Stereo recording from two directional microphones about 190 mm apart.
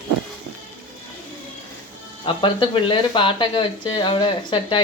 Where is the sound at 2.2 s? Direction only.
25° left (ahead or behind).